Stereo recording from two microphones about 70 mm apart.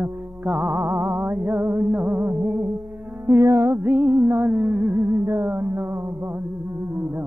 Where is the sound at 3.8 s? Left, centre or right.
Right.